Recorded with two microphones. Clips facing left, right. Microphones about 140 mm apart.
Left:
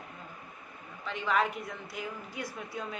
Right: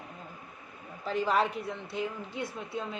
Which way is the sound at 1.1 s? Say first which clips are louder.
Right 2 dB; 35° right (ahead or behind).